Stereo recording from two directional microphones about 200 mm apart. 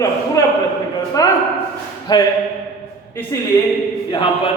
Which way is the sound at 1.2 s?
15° left (ahead or behind).